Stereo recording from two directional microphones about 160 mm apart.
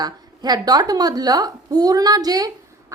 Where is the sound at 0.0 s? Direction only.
25° right (ahead or behind).